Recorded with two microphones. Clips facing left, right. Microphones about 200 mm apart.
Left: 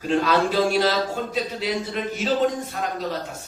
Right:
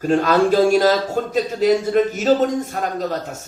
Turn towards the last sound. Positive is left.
turn(degrees=-45)  # may be behind; listen again after turning